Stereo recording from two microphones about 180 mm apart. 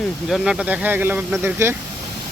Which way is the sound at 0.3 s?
5° right (ahead or behind).